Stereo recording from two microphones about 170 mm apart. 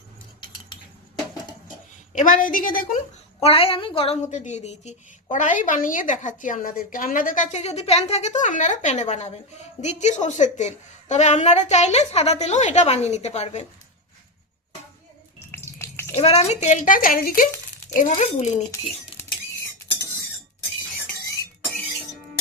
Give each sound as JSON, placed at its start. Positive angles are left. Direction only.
{"t": 2.1, "sound": "a woman's voice", "side_deg": 50}
{"t": 3.4, "sound": "a woman's voice", "side_deg": 35}
{"t": 15.5, "sound": "a sound", "side_deg": 15}
{"t": 16.1, "sound": "a woman's voice", "side_deg": 35}